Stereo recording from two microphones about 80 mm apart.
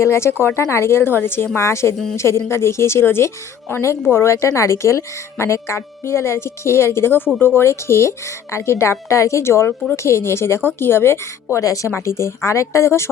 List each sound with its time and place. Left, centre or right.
0.0 s speech: left
11.5 s a woman's voice: left